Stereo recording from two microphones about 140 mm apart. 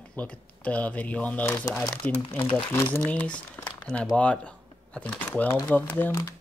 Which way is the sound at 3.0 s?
10° left (ahead or behind).